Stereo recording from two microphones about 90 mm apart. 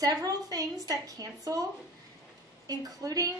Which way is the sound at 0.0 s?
45° right (ahead or behind).